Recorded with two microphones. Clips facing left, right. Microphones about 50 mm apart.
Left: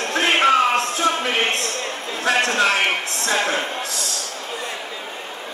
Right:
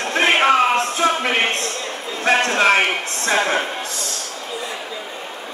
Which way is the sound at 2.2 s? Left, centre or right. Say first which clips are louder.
Right 2 dB; right.